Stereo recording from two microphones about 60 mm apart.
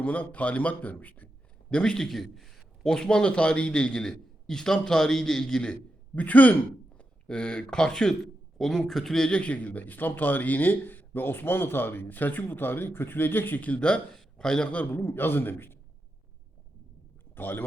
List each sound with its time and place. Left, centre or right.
0.0 s a man's voice: left
1.7 s a man's voice: centre
6.1 s a man's voice: left
14.1 s a man's voice: centre
14.7 s a man's voice: left
15.0 s a man's voice: left
17.3 s speech: left